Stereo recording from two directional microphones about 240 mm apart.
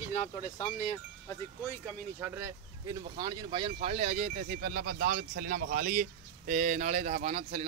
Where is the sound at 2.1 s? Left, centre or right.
Centre.